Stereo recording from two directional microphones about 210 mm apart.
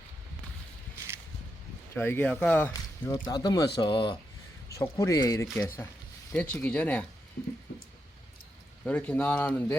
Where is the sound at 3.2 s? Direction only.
20° left (ahead or behind).